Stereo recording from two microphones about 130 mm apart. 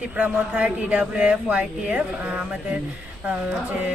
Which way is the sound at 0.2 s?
10° right (ahead or behind).